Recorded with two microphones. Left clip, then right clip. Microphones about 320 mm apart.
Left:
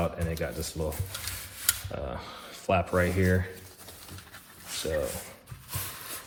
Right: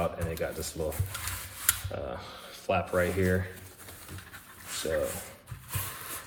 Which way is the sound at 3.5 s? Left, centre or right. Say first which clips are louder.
Left 1 dB; centre.